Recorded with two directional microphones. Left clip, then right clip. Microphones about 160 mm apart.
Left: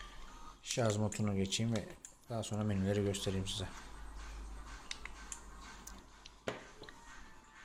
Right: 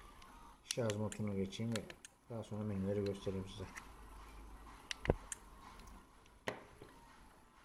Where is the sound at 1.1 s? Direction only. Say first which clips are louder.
Left 5 dB; 5° left (ahead or behind).